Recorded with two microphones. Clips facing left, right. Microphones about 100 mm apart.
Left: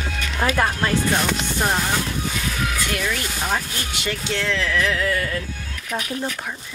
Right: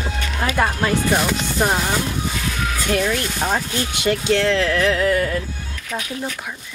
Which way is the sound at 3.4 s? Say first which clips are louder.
Right 3 dB; 20° right (ahead or behind).